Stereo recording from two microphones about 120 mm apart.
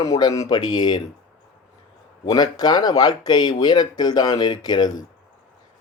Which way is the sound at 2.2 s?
35° left (ahead or behind).